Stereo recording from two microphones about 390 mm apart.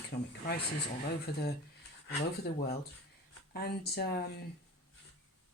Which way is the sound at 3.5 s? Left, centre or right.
Left.